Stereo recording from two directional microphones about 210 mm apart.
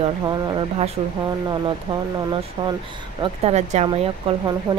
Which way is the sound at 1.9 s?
25° right (ahead or behind).